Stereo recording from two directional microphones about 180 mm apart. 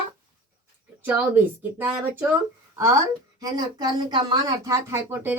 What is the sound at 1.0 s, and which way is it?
Speech, 10° right (ahead or behind).